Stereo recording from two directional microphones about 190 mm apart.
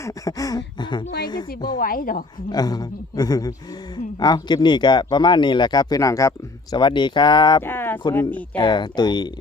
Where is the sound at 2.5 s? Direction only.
20° left (ahead or behind).